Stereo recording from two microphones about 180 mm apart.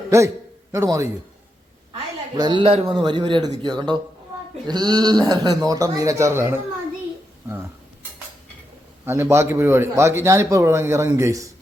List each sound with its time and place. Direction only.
0.7 s a man's voice: 15° right (ahead or behind)
2.3 s speech: 25° right (ahead or behind)
9.0 s a man's voice: 15° right (ahead or behind)